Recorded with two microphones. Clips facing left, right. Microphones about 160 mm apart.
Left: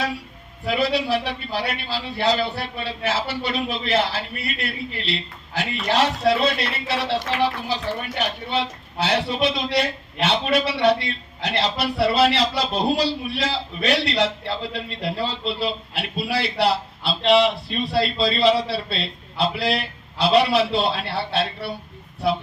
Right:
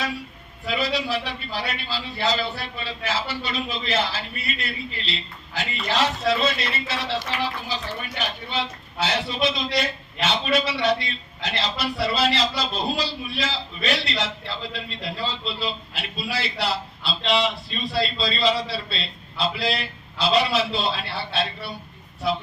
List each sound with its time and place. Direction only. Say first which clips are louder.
0.6 s a man's voice: left 4 dB; 65° left (ahead or behind)